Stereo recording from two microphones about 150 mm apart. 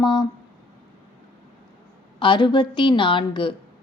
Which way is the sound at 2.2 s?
30° left (ahead or behind).